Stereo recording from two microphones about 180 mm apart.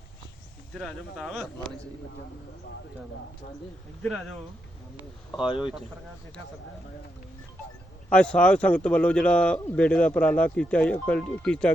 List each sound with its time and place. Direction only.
0.7 s speech: centre (ahead or behind)
4.9 s speech: 25° left (ahead or behind)
8.1 s speech: 5° left (ahead or behind)